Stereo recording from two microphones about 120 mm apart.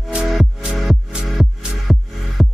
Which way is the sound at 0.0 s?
5° right (ahead or behind).